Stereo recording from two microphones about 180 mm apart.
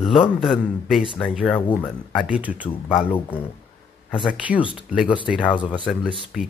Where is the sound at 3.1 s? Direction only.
10° left (ahead or behind).